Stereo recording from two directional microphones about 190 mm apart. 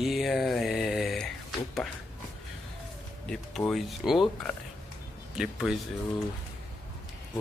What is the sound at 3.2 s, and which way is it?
Speech, 5° left (ahead or behind).